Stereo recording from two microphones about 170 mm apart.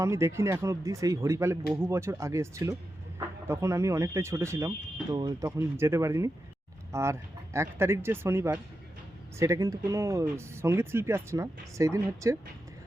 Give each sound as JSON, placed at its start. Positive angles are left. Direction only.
{"t": 0.0, "sound": "speech", "side_deg": -15}